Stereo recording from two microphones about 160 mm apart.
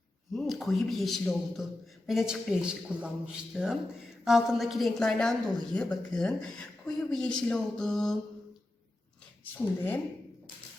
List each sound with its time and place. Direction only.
0.3 s a woman's voice: centre (ahead or behind)
9.4 s speech: 10° left (ahead or behind)